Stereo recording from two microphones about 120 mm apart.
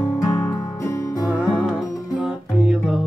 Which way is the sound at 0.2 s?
30° left (ahead or behind).